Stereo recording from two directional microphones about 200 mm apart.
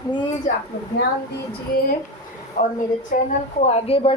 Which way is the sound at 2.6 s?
40° left (ahead or behind).